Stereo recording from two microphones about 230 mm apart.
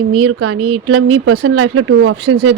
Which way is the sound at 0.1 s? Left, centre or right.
Right.